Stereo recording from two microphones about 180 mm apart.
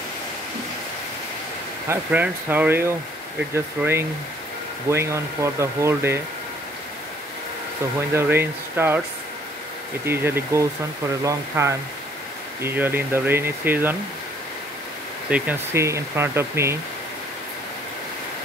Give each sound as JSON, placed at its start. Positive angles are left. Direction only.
{"t": 1.9, "sound": "speech", "side_deg": -10}
{"t": 8.1, "sound": "speech", "side_deg": -15}
{"t": 10.0, "sound": "speech", "side_deg": -15}
{"t": 15.2, "sound": "speech", "side_deg": -10}